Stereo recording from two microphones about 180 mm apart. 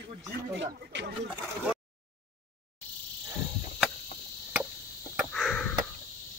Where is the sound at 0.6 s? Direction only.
65° right (ahead or behind).